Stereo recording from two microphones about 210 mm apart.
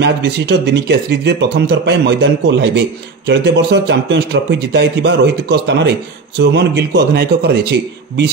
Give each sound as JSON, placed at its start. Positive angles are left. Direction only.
{"t": 0.0, "sound": "speech", "side_deg": -55}